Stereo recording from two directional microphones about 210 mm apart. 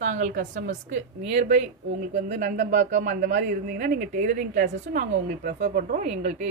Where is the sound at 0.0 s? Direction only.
35° right (ahead or behind).